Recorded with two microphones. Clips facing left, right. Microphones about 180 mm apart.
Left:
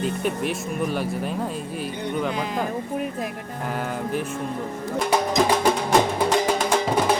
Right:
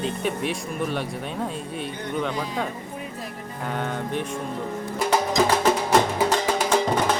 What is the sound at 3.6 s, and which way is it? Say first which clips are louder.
Speech: even; 5° left (ahead or behind).